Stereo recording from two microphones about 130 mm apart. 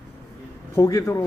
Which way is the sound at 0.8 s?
25° left (ahead or behind).